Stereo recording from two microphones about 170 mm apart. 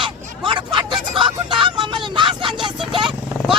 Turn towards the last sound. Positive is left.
turn(degrees=-30)  # may be behind; listen again after turning